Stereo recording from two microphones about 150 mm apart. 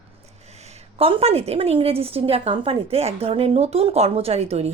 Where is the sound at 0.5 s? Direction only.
45° right (ahead or behind).